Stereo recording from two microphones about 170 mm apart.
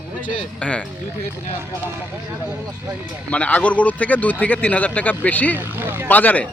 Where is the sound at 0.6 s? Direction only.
5° left (ahead or behind).